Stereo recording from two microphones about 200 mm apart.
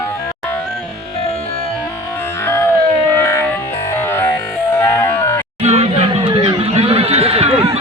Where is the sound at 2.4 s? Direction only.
15° left (ahead or behind).